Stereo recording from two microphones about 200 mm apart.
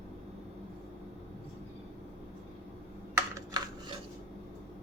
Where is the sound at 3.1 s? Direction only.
15° right (ahead or behind).